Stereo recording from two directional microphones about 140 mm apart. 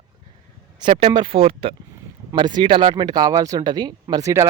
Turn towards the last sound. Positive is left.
turn(degrees=-20)  # may be behind; listen again after turning